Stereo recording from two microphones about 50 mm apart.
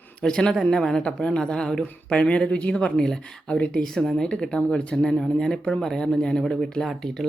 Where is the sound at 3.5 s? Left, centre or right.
Left.